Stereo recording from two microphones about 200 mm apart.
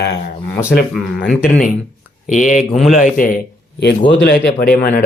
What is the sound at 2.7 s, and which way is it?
Speech, centre (ahead or behind).